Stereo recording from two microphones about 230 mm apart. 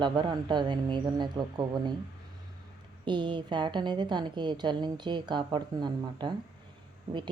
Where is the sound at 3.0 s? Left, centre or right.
Centre.